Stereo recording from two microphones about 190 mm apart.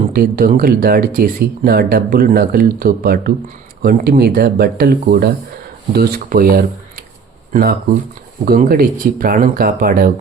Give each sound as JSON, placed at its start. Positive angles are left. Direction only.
{"t": 0.1, "sound": "speech", "side_deg": -50}